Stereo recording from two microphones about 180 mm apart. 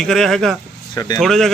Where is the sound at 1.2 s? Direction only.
Centre (ahead or behind).